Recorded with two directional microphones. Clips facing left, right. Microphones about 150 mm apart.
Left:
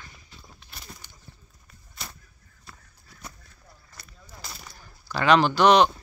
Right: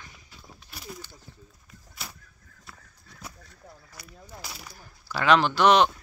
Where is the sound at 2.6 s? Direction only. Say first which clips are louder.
Even; 5° right (ahead or behind).